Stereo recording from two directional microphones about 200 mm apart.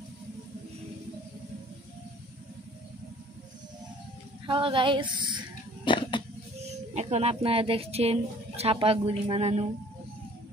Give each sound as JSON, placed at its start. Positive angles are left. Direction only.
{"t": 4.5, "sound": "speech", "side_deg": -25}
{"t": 5.9, "sound": "a sound", "side_deg": 25}
{"t": 6.7, "sound": "speech", "side_deg": -35}